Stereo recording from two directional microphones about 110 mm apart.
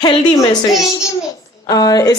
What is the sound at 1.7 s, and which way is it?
Speech, 35° left (ahead or behind).